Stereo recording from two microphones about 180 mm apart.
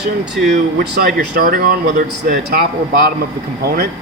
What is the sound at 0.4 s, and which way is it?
A man's voice, 60° right (ahead or behind).